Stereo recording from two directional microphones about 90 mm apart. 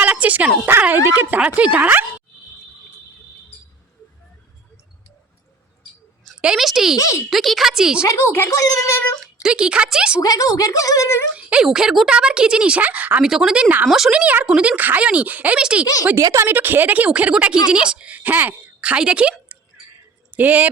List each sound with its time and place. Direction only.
0.0 s a sound: 15° right (ahead or behind)
0.6 s speech: 20° right (ahead or behind)
6.4 s a woman's voice: 5° right (ahead or behind)
6.9 s speech: 35° left (ahead or behind)
7.3 s a woman's voice: centre (ahead or behind)
8.0 s speech: 35° left (ahead or behind)
9.2 s a woman's voice: 10° right (ahead or behind)
10.2 s speech: 40° left (ahead or behind)
11.3 s speech: 15° right (ahead or behind)
13.2 s speech: 5° right (ahead or behind)
13.8 s a woman's voice: 5° right (ahead or behind)
14.1 s speech: 15° right (ahead or behind)
16.1 s speech: 35° right (ahead or behind)
16.5 s speech: 20° right (ahead or behind)